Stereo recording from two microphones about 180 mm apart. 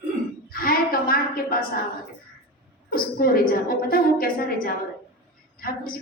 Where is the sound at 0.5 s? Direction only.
55° left (ahead or behind).